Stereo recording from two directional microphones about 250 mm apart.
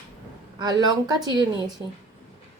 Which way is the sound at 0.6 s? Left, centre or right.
Centre.